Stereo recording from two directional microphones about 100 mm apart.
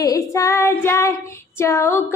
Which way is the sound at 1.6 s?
30° left (ahead or behind).